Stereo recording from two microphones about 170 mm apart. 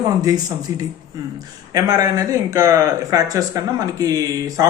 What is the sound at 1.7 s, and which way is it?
Speech, 20° right (ahead or behind).